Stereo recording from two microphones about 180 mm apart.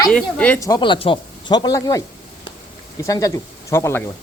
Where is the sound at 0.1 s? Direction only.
5° left (ahead or behind).